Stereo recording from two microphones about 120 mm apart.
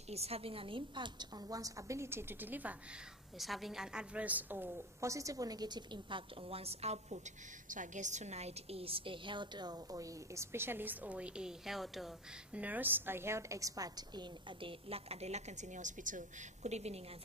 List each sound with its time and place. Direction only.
0.1 s a woman's voice: 55° right (ahead or behind); by 2.7 s 15° right (ahead or behind)
3.3 s a woman's voice: centre (ahead or behind); by 7.2 s 60° right (ahead or behind)
7.7 s a woman's voice: 90° right; by 12.1 s centre (ahead or behind)
12.5 s a woman's voice: 15° right (ahead or behind); by 14.2 s 30° right (ahead or behind)
14.6 s a woman's voice: 50° right (ahead or behind)